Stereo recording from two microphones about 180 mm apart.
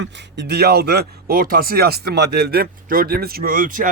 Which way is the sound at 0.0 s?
75° right (ahead or behind).